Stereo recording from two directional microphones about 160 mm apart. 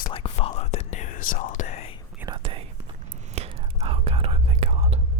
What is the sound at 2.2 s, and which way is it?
Whispering, 30° right (ahead or behind).